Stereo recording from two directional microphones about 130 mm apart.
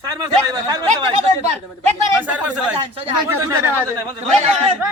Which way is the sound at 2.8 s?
40° right (ahead or behind).